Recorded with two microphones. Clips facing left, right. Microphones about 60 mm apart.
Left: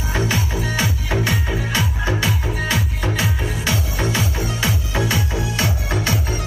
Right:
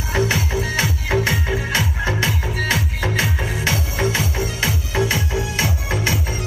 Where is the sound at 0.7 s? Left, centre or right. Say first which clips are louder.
Right 1 dB; right.